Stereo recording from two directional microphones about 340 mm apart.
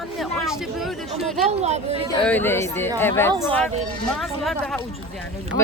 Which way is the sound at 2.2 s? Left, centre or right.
Centre.